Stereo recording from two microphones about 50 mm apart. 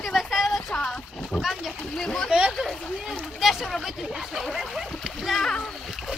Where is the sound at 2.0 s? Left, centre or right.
Centre.